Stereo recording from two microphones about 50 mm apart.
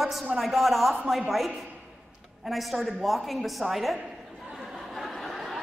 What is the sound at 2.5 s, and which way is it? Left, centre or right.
A woman's voice, centre.